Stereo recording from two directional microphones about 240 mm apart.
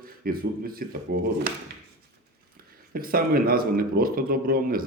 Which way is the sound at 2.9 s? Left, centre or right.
Right.